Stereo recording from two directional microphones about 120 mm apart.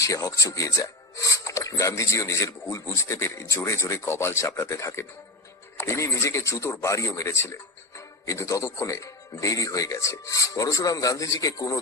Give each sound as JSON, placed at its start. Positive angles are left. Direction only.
{"t": 0.0, "sound": "a man's voice", "side_deg": 25}